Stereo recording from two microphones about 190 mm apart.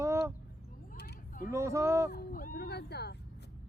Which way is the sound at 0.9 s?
50° left (ahead or behind).